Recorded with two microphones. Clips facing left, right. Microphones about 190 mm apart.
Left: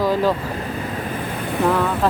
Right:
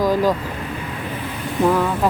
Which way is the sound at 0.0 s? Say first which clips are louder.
Right 1 dB; 15° right (ahead or behind).